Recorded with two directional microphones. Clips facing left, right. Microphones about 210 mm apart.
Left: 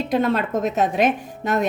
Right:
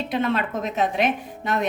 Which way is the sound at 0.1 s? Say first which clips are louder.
Left 4 dB; 40° left (ahead or behind).